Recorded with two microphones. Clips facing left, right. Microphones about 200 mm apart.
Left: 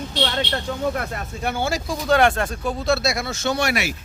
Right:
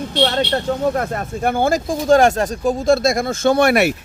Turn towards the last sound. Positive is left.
turn(degrees=-55)  # may be behind; listen again after turning